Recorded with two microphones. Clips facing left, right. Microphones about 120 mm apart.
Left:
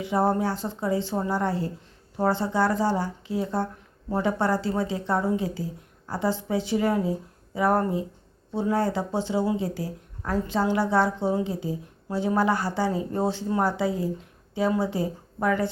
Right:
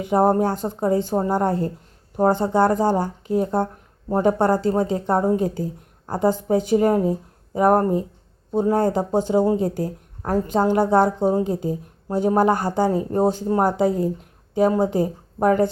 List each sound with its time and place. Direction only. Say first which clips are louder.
0.0 s speech: right 6 dB; 50° right (ahead or behind)